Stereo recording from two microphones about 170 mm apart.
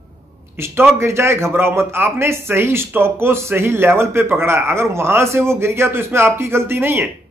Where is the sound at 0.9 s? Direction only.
15° right (ahead or behind).